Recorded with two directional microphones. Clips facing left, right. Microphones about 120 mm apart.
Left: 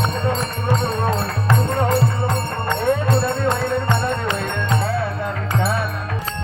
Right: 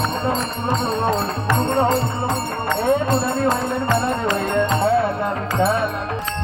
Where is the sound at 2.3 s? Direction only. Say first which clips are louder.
Right 1 dB; 5° right (ahead or behind).